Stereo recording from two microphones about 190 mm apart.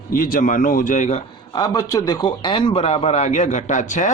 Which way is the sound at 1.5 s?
20° left (ahead or behind).